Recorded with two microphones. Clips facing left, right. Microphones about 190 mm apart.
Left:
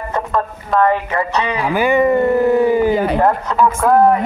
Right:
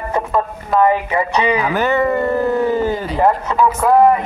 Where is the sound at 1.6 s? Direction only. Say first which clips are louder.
Left 2 dB; 10° left (ahead or behind).